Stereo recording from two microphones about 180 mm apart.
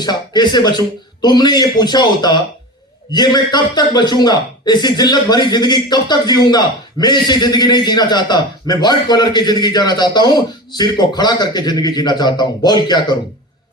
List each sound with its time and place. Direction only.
0.0 s a man's voice: 25° left (ahead or behind)